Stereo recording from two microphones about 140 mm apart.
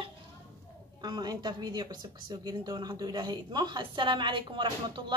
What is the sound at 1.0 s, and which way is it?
Speech, 30° right (ahead or behind).